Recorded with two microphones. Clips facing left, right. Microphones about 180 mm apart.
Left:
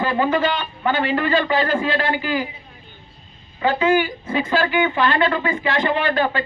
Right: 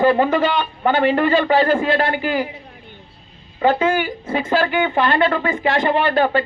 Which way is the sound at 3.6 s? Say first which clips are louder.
Right 1 dB; 50° right (ahead or behind).